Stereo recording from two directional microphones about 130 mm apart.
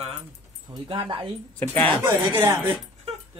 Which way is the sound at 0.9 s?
40° right (ahead or behind).